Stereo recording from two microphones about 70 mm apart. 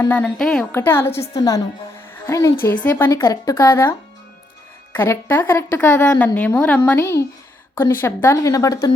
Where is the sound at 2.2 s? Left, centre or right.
Left.